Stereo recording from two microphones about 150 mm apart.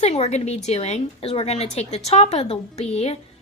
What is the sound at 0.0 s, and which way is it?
A woman's voice, 45° left (ahead or behind).